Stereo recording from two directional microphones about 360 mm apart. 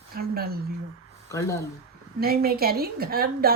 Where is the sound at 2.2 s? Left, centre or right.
Right.